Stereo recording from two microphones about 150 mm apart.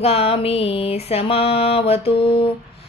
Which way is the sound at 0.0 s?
40° left (ahead or behind).